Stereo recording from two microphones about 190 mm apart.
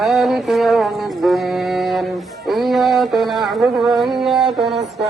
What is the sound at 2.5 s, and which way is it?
Mantra, centre (ahead or behind).